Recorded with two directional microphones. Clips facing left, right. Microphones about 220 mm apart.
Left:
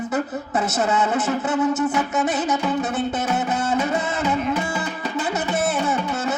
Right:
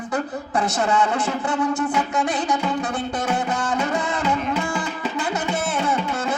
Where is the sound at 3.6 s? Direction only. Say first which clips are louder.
Left 1 dB; 25° left (ahead or behind).